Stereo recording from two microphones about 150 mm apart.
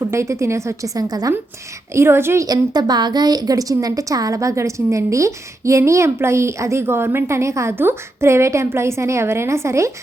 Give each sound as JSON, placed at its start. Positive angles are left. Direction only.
{"t": 0.0, "sound": "a woman's voice", "side_deg": -20}